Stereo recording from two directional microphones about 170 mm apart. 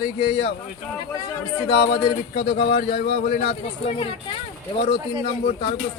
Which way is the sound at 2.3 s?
75° left (ahead or behind).